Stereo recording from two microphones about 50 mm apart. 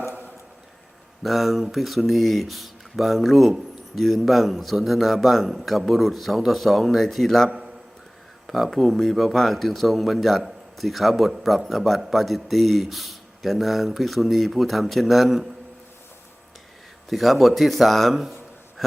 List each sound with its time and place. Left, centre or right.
0.1 s a sound: right
1.2 s speech: centre
17.1 s speech: centre